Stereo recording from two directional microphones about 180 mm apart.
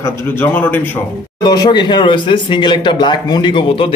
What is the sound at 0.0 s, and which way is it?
Speech, 10° left (ahead or behind).